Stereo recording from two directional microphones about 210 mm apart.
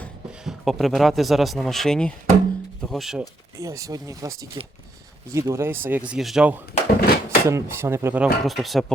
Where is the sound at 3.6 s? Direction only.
15° right (ahead or behind).